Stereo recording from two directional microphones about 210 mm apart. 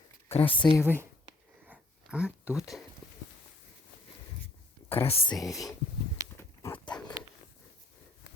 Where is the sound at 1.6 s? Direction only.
5° right (ahead or behind).